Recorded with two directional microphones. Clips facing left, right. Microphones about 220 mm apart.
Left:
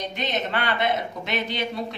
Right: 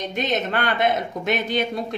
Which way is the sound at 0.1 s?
45° right (ahead or behind).